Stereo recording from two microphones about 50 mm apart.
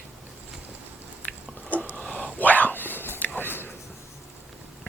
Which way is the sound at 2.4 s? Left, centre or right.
Left.